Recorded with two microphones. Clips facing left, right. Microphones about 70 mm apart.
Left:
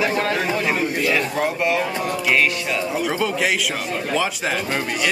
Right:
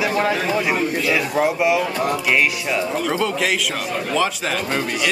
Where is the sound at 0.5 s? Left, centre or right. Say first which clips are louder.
Right 1 dB; centre.